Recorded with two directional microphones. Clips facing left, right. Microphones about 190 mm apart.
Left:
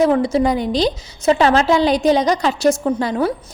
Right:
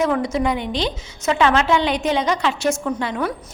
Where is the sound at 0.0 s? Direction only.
30° left (ahead or behind).